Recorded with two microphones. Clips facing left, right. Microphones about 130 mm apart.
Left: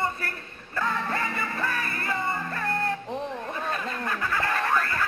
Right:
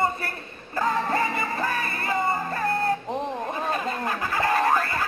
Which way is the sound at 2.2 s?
35° right (ahead or behind).